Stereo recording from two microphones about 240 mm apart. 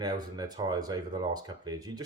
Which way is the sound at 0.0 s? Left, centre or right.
Centre.